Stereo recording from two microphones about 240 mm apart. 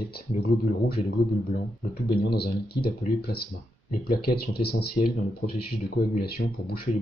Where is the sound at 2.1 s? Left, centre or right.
Left.